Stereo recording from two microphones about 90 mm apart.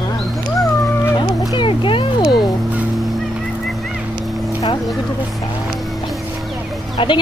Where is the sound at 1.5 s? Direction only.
65° left (ahead or behind).